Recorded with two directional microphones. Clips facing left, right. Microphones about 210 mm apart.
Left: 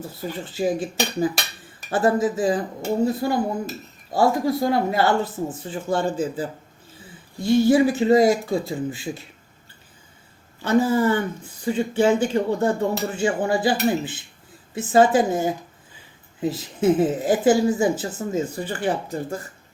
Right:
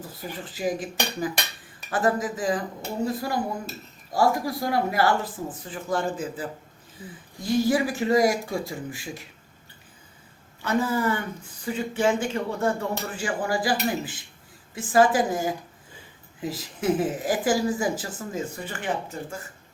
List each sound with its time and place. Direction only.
0.0 s dishes: 25° left (ahead or behind)
10.6 s dishes: 30° left (ahead or behind)